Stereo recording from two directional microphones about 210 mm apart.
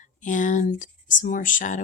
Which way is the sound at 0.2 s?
35° left (ahead or behind).